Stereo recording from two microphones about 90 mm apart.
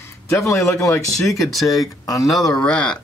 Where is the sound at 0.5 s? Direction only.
35° left (ahead or behind).